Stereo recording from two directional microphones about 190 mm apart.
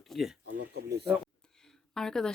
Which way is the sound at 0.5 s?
60° right (ahead or behind).